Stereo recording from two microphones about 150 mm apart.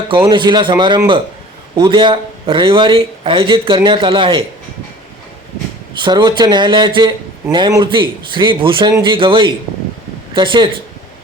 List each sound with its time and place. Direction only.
0.3 s speech: 30° right (ahead or behind)
6.0 s speech: 30° right (ahead or behind)